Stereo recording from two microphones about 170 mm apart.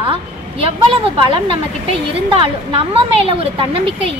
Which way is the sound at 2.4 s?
30° right (ahead or behind).